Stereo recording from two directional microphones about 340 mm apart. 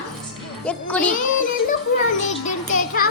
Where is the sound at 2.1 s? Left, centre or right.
Left.